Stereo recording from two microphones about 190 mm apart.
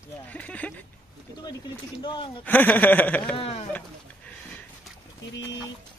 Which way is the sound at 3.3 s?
30° left (ahead or behind).